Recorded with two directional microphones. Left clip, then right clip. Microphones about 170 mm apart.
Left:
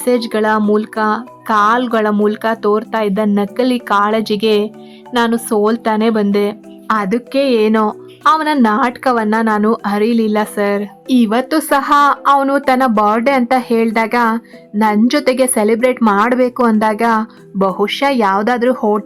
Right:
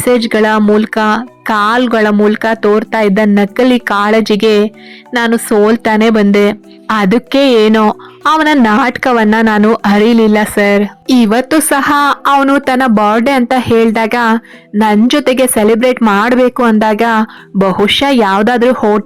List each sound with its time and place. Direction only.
0.0 s speech: 20° right (ahead or behind)
6.8 s speech: 35° right (ahead or behind)